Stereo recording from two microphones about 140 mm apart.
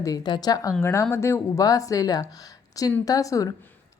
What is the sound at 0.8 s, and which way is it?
A woman's voice, 15° left (ahead or behind).